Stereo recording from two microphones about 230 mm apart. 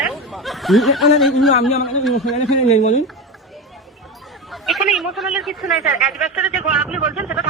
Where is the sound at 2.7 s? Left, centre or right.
Left.